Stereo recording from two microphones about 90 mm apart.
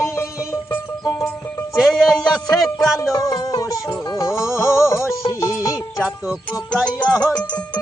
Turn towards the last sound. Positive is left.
turn(degrees=40)  # may be behind; listen again after turning